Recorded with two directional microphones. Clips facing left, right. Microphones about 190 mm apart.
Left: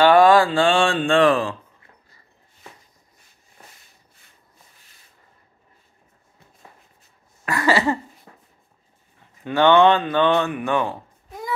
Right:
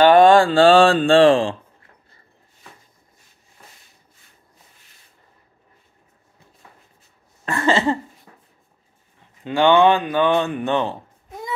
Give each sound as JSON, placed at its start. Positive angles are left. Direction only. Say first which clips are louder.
{"t": 0.1, "sound": "speech", "louder": "right 2 dB", "side_deg": -25}
{"t": 7.4, "sound": "cough", "louder": "right 1 dB", "side_deg": -25}
{"t": 9.4, "sound": "speech", "louder": "even", "side_deg": -15}
{"t": 10.5, "sound": "a sound", "louder": "right 1 dB", "side_deg": -25}